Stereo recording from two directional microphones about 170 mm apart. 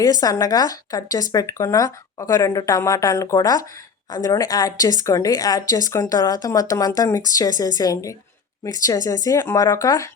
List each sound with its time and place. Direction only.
0.0 s speech: 20° left (ahead or behind)